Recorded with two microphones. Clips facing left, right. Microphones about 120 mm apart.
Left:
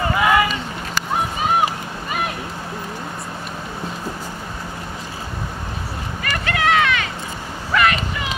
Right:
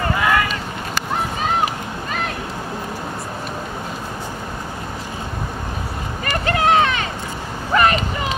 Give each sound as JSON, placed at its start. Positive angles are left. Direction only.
{"t": 0.0, "sound": "run", "side_deg": 5}
{"t": 6.2, "sound": "a sound", "side_deg": -30}
{"t": 7.7, "sound": "vehicle", "side_deg": -35}